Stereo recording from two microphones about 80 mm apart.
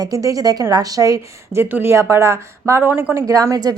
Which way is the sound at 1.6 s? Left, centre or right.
Right.